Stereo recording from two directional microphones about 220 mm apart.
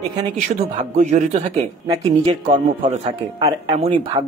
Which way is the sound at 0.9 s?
35° right (ahead or behind).